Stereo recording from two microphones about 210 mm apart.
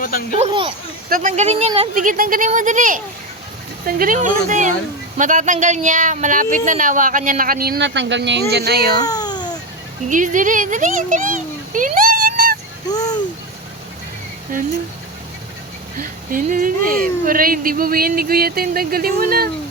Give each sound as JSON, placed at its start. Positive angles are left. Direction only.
{"t": 0.0, "sound": "speech", "side_deg": 40}
{"t": 0.3, "sound": "speech", "side_deg": -25}
{"t": 9.0, "sound": "babbling", "side_deg": 20}
{"t": 10.1, "sound": "a child's voice", "side_deg": -40}
{"t": 12.9, "sound": "a sound", "side_deg": 15}
{"t": 16.0, "sound": "speech", "side_deg": -40}